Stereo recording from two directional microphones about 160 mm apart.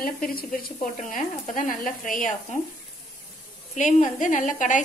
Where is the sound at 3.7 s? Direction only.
50° left (ahead or behind).